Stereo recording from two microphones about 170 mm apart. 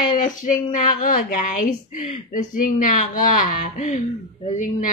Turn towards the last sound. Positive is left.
turn(degrees=50)  # may be behind; listen again after turning